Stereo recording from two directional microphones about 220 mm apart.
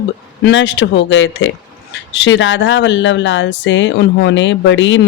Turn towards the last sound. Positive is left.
turn(degrees=55)  # may be behind; listen again after turning